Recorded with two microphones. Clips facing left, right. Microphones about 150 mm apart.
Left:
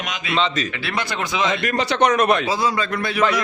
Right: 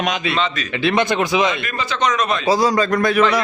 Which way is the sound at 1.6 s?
70° left (ahead or behind).